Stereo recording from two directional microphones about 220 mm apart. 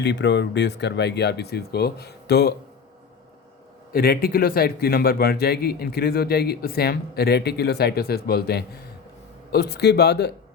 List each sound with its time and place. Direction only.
0.0 s a man's voice: 50° left (ahead or behind)
3.9 s a man's voice: 45° left (ahead or behind)